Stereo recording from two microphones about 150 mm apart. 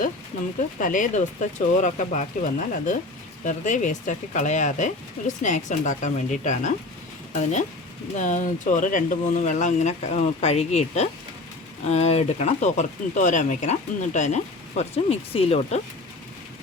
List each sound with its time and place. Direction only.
0.8 s speech: 60° left (ahead or behind)
8.1 s speech: 55° left (ahead or behind)